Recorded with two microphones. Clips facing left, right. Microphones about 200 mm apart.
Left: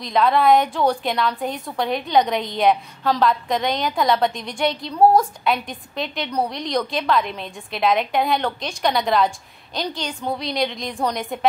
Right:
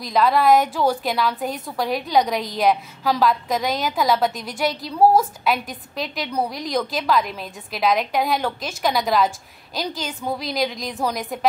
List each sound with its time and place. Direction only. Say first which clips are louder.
0.0 s a woman's voice: even; centre (ahead or behind)